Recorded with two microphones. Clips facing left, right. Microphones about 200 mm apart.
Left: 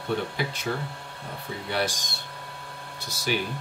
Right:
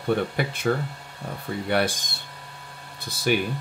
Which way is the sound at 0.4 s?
55° right (ahead or behind).